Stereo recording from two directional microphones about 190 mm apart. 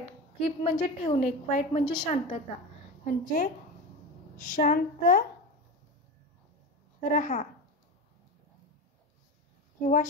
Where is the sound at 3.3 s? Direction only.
50° left (ahead or behind).